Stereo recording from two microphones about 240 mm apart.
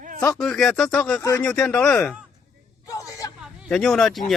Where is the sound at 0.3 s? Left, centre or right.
Centre.